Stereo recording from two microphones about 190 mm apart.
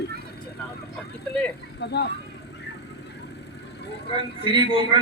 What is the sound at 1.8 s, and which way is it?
Speech, 65° left (ahead or behind).